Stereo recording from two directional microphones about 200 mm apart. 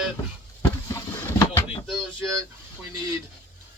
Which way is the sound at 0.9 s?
15° left (ahead or behind).